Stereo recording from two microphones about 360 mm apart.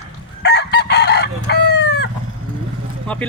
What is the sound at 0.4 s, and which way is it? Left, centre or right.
Chicken, left.